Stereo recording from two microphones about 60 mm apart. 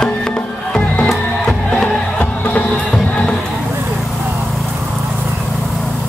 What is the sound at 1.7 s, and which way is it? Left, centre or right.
Music, left.